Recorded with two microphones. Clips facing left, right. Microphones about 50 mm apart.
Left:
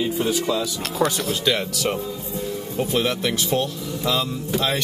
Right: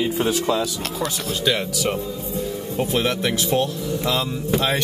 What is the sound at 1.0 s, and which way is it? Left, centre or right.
Speech, left.